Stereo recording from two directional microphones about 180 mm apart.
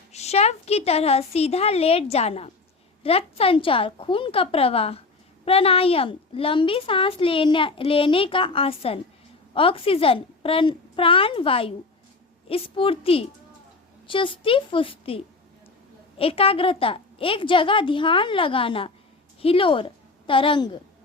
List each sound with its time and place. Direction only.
0.1 s a woman's voice: 35° left (ahead or behind)